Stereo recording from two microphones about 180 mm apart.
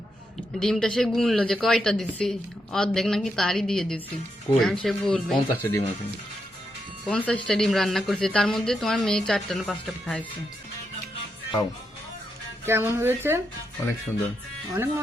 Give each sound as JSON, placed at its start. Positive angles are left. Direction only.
{"t": 0.6, "sound": "speech", "side_deg": 5}
{"t": 5.6, "sound": "speech", "side_deg": 15}
{"t": 7.1, "sound": "speech", "side_deg": 5}
{"t": 12.6, "sound": "speech", "side_deg": -10}
{"t": 14.7, "sound": "speech", "side_deg": -20}